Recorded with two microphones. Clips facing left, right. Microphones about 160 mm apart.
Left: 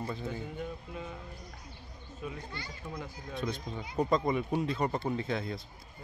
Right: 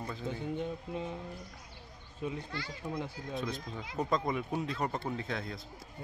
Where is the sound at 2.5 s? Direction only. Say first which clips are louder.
Right 3 dB; 90° right.